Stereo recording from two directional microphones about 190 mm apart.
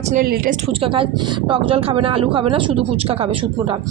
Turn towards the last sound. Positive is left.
turn(degrees=-30)  # may be behind; listen again after turning